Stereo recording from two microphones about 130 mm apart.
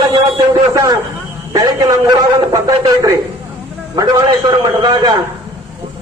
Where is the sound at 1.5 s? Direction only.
30° right (ahead or behind).